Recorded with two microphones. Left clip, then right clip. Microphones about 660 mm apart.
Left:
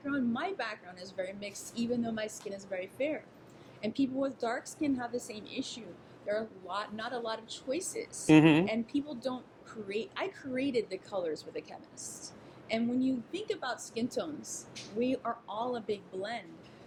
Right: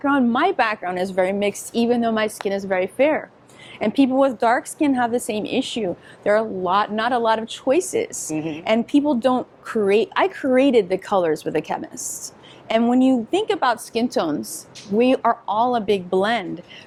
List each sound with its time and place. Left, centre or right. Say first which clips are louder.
0.1 s speech: right 15 dB; right